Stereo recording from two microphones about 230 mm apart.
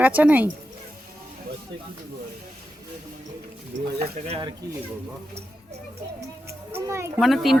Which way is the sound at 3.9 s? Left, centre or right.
Right.